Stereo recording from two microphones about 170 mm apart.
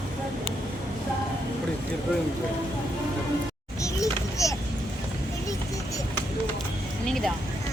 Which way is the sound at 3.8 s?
20° left (ahead or behind).